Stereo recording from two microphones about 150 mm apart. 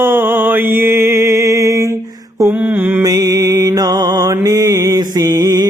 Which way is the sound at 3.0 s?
25° right (ahead or behind).